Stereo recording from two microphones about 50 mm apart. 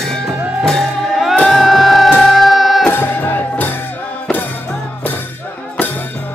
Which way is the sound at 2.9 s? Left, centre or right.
Left.